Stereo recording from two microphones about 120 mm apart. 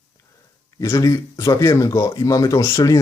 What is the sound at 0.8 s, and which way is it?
Speech, 25° left (ahead or behind).